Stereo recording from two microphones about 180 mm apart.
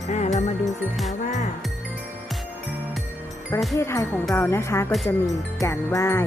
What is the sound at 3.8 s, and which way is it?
Music, 15° left (ahead or behind).